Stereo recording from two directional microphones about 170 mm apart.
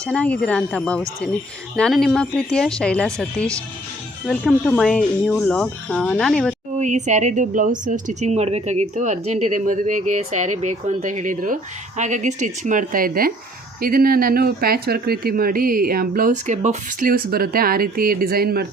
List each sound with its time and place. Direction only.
0.0 s speech: 5° left (ahead or behind)
6.7 s a woman's voice: 45° right (ahead or behind); by 18.7 s 65° right (ahead or behind)